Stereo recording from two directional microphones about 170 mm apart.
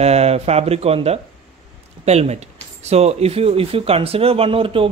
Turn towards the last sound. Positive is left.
turn(degrees=-30)  # may be behind; listen again after turning